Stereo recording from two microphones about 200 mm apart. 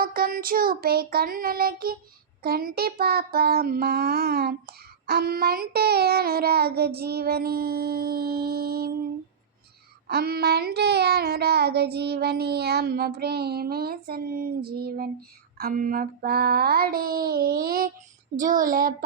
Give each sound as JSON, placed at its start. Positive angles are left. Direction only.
{"t": 0.0, "sound": "child singing", "side_deg": -45}
{"t": 10.1, "sound": "child singing", "side_deg": -50}